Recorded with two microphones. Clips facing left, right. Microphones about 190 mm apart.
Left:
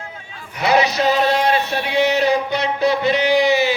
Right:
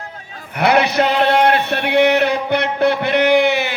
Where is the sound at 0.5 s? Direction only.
60° right (ahead or behind).